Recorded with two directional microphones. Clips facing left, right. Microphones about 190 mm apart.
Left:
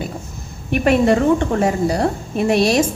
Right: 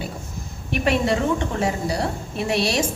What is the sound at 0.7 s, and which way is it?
A woman's voice, 50° left (ahead or behind).